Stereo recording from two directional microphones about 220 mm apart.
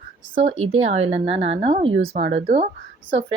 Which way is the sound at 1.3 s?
55° right (ahead or behind).